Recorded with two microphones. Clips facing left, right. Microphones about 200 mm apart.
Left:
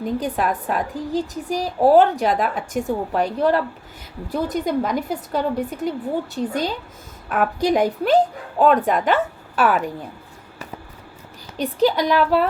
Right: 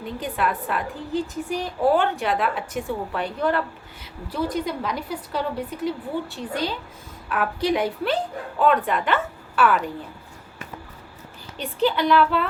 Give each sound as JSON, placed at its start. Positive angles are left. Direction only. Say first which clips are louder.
{"t": 0.0, "sound": "a woman's voice", "louder": "left 4 dB", "side_deg": 40}
{"t": 11.5, "sound": "a woman's voice", "louder": "left 4 dB", "side_deg": 40}